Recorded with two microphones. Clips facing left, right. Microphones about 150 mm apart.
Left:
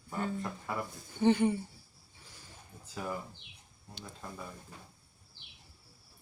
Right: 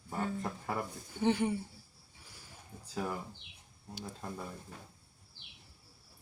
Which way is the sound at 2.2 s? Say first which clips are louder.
Left 1 dB; 10° right (ahead or behind).